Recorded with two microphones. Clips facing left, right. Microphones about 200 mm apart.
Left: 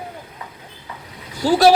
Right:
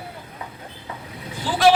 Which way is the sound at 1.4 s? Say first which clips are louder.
Left 10 dB; 40° left (ahead or behind).